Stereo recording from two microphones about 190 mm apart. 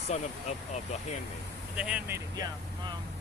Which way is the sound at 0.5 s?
35° left (ahead or behind).